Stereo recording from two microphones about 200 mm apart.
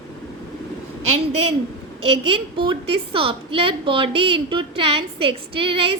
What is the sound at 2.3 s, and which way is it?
A woman's voice, 25° right (ahead or behind).